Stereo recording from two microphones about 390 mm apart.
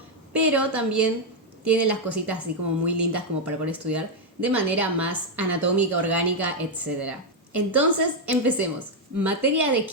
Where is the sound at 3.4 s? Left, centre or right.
Centre.